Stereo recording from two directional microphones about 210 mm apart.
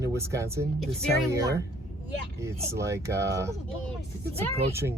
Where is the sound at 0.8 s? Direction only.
Centre (ahead or behind).